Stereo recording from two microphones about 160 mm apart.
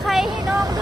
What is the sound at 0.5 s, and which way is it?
Speech, 25° right (ahead or behind).